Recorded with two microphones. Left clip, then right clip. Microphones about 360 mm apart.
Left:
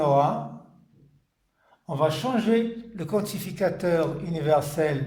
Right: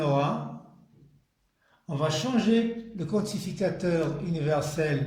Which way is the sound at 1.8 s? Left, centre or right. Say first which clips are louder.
Left 4 dB; centre.